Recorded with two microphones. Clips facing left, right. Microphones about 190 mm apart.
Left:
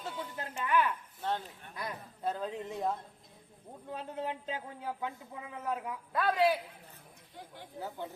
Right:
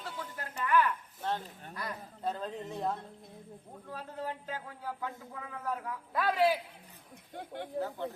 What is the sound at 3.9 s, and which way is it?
A man's voice, 20° left (ahead or behind).